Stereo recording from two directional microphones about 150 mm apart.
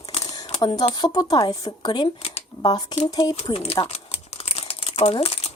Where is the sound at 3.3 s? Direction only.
45° left (ahead or behind).